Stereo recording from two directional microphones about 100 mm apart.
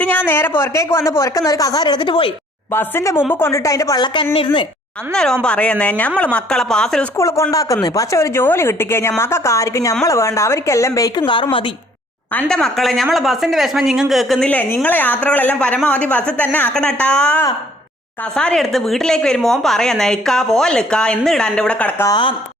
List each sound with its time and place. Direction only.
0.0 s a woman's voice: 15° left (ahead or behind); by 2.3 s 55° left (ahead or behind)
2.7 s a woman's voice: 25° left (ahead or behind)
4.0 s a woman's voice: 50° left (ahead or behind)
5.1 s a woman's voice: 5° left (ahead or behind)
7.2 s a woman's voice: 30° left (ahead or behind)
12.5 s a woman's voice: 5° left (ahead or behind)
22.1 s a woman's voice: 55° left (ahead or behind)